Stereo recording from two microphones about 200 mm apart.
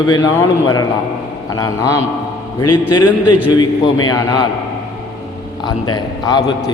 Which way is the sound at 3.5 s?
20° left (ahead or behind).